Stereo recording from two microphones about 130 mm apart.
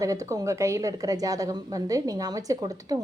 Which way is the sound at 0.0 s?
25° right (ahead or behind).